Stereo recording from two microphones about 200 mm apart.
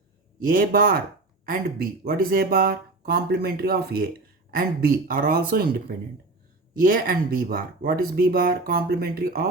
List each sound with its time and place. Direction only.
0.3 s speech: 45° right (ahead or behind)
6.7 s speech: 45° right (ahead or behind)